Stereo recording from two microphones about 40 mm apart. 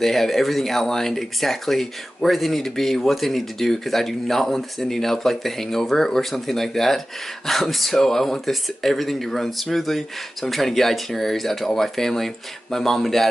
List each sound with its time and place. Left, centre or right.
0.0 s speech: centre